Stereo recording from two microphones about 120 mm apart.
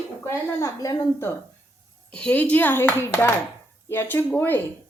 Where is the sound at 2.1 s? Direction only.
10° left (ahead or behind).